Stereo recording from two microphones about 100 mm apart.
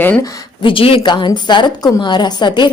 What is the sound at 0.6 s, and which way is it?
Speech, 65° left (ahead or behind).